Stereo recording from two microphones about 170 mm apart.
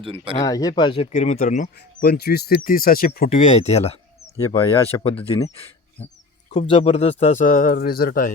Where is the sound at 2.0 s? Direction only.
70° left (ahead or behind).